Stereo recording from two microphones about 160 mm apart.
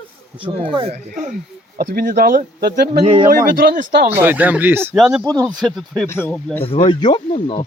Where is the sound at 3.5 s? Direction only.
65° right (ahead or behind).